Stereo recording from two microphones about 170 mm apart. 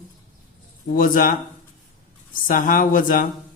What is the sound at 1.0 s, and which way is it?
Speech, 55° left (ahead or behind).